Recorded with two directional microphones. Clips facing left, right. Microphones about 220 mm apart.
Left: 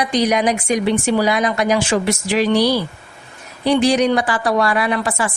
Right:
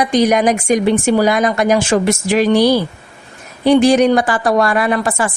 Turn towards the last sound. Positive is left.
turn(degrees=-45)  # may be behind; listen again after turning